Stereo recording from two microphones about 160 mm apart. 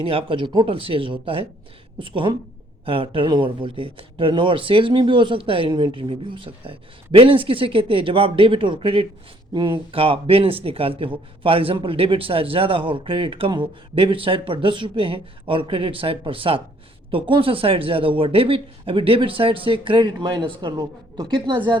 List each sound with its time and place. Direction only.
0.0 s speech: 35° right (ahead or behind)